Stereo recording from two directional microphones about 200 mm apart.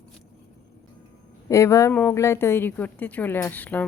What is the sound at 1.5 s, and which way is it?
Speech, 15° left (ahead or behind).